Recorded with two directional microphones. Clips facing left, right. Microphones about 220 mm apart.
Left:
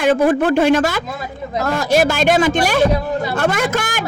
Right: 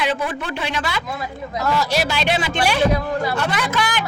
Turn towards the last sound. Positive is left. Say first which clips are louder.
# left 3 dB
turn(degrees=45)  # may be behind; listen again after turning